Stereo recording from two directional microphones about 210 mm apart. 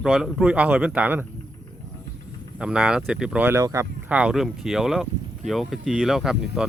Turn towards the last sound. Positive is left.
turn(degrees=0)  # may be behind; listen again after turning